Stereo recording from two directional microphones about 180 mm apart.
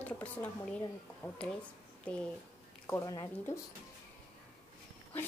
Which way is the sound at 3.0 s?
20° left (ahead or behind).